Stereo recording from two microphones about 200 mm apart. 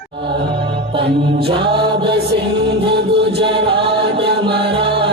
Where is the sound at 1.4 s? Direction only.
25° right (ahead or behind).